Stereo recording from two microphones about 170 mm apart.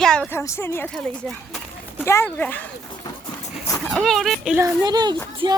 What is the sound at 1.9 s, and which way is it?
Speech, 15° left (ahead or behind).